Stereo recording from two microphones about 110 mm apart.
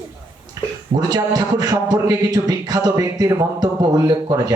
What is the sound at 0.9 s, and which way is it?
Speech, 35° right (ahead or behind).